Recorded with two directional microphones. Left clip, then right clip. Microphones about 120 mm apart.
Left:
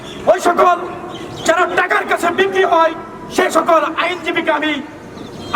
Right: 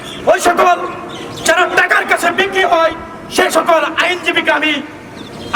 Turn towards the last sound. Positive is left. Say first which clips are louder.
# right 3 dB
turn(degrees=-5)  # may be behind; listen again after turning